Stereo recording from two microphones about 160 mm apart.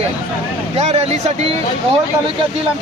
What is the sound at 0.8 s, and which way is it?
Speech, 40° right (ahead or behind).